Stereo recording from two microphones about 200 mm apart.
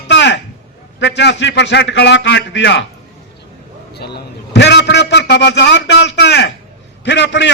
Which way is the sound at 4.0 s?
55° left (ahead or behind).